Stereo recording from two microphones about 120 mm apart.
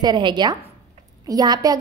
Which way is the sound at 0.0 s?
35° right (ahead or behind).